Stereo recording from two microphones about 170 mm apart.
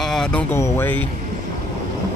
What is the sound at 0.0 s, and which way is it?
Speech, 5° left (ahead or behind).